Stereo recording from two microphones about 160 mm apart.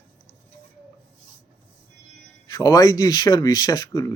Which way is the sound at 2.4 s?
25° left (ahead or behind).